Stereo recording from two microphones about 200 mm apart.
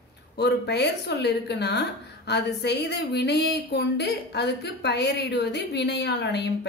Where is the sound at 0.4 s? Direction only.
55° left (ahead or behind).